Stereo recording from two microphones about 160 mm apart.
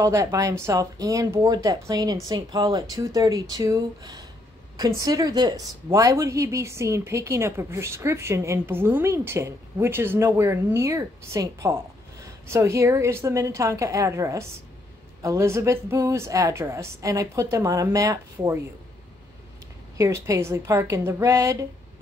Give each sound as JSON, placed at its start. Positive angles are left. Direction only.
{"t": 0.0, "sound": "a woman's voice", "side_deg": -20}
{"t": 20.0, "sound": "a woman's voice", "side_deg": -20}